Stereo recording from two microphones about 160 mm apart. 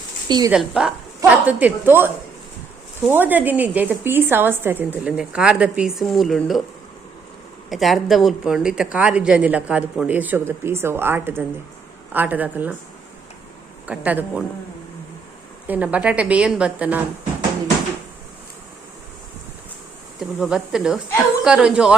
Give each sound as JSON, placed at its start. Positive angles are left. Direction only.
{"t": 0.3, "sound": "a woman's voice", "side_deg": -25}
{"t": 0.5, "sound": "speech", "side_deg": -5}
{"t": 7.7, "sound": "speech", "side_deg": 0}
{"t": 13.8, "sound": "speech", "side_deg": -10}
{"t": 15.6, "sound": "speech", "side_deg": -10}
{"t": 20.1, "sound": "speech", "side_deg": -5}